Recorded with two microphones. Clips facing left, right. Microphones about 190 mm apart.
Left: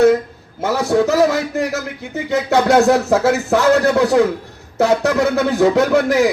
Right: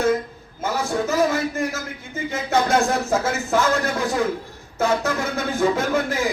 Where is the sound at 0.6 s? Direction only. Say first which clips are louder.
Left 8 dB; 70° left (ahead or behind).